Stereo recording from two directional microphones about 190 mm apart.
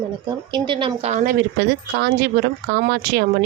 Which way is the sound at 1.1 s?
45° right (ahead or behind).